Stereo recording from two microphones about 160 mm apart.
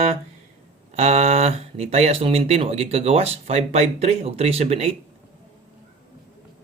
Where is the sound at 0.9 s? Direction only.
40° right (ahead or behind).